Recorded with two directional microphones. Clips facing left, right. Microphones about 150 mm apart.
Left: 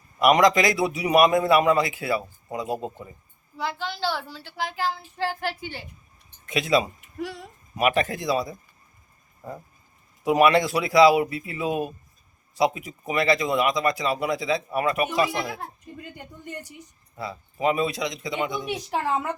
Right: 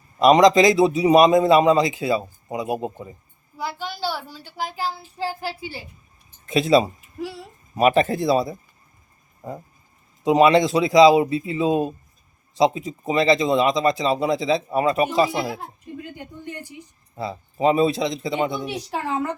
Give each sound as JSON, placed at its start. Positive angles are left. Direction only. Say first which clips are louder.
{"t": 0.2, "sound": "a man's voice", "louder": "right 5 dB", "side_deg": -25}
{"t": 6.4, "sound": "speech", "louder": "right 5 dB", "side_deg": -30}
{"t": 10.2, "sound": "a man's voice", "louder": "right 3 dB", "side_deg": -20}
{"t": 15.3, "sound": "a child's voice", "louder": "right 4 dB", "side_deg": -10}
{"t": 17.2, "sound": "a man's voice", "louder": "right 5 dB", "side_deg": -25}
{"t": 18.7, "sound": "a woman's voice", "louder": "even", "side_deg": 5}